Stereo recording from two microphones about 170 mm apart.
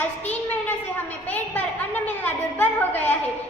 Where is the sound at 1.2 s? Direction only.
10° left (ahead or behind).